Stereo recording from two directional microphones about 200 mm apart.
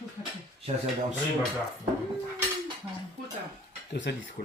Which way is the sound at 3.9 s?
55° left (ahead or behind).